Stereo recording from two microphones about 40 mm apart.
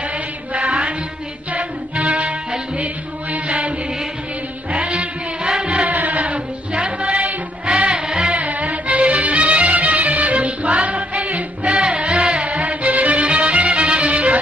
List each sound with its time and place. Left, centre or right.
0.5 s mantra: right
1.5 s music: right
5.9 s music: right
8.4 s music: right